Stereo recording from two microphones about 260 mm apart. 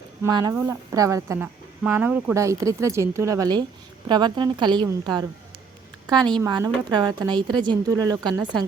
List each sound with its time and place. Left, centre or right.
0.2 s a woman's voice: centre